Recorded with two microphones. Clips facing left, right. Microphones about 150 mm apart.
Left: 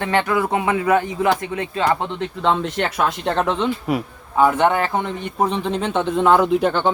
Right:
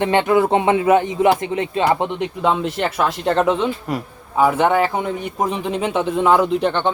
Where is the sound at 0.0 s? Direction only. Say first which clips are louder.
Right 4 dB; 20° right (ahead or behind); by 3.7 s 5° right (ahead or behind).